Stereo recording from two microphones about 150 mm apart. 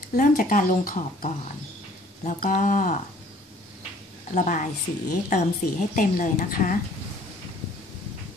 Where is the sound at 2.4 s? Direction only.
55° left (ahead or behind).